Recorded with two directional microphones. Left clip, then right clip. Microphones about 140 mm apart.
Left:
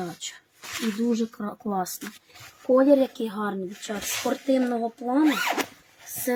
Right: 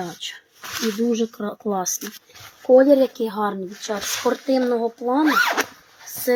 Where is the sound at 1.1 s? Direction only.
35° left (ahead or behind).